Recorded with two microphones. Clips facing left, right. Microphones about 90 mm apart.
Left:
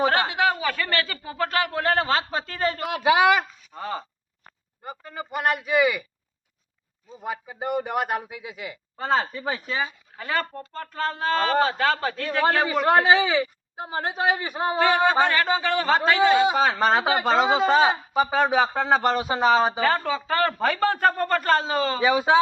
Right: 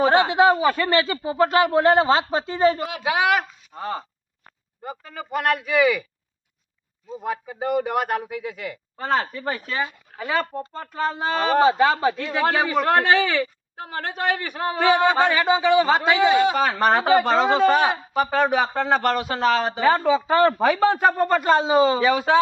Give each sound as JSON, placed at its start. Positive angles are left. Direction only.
{"t": 0.1, "sound": "speech", "side_deg": -25}
{"t": 2.8, "sound": "speech", "side_deg": 0}
{"t": 7.2, "sound": "speech", "side_deg": 5}
{"t": 10.2, "sound": "speech", "side_deg": -15}
{"t": 12.4, "sound": "speech", "side_deg": 0}
{"t": 14.8, "sound": "speech", "side_deg": -10}
{"t": 17.0, "sound": "speech", "side_deg": 10}
{"t": 20.0, "sound": "speech", "side_deg": -15}
{"t": 22.0, "sound": "speech", "side_deg": 10}